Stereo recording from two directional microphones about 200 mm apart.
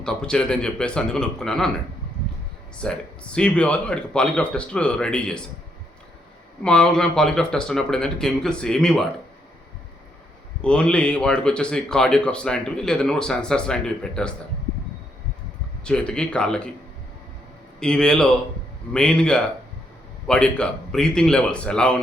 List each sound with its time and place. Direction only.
0.0 s speech: 5° left (ahead or behind)
2.8 s speech: 5° left (ahead or behind)
6.6 s speech: 5° left (ahead or behind)
10.6 s speech: 5° left (ahead or behind)
15.8 s speech: 5° left (ahead or behind)
17.7 s speech: 5° left (ahead or behind)